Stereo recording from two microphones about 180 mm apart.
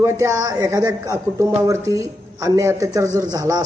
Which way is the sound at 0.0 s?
15° right (ahead or behind).